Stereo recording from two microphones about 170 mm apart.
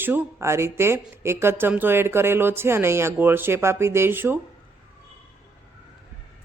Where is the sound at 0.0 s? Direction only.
15° right (ahead or behind).